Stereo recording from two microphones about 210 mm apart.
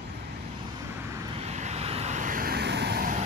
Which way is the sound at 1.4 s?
30° right (ahead or behind).